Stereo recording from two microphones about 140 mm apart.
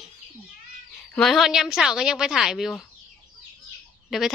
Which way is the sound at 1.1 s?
Centre (ahead or behind).